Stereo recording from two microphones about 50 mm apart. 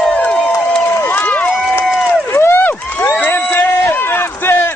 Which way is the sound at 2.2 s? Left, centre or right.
Left.